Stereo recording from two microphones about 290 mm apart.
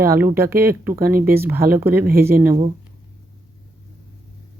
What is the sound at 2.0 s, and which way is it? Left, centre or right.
Speech, right.